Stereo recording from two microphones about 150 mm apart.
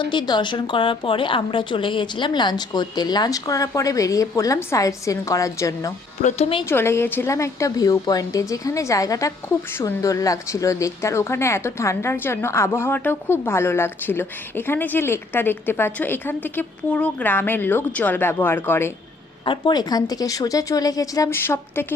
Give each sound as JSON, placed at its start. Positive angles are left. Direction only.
{"t": 0.0, "sound": "speech", "side_deg": 30}
{"t": 6.2, "sound": "speech", "side_deg": 45}
{"t": 6.7, "sound": "a woman's voice", "side_deg": 15}
{"t": 19.5, "sound": "speech", "side_deg": 30}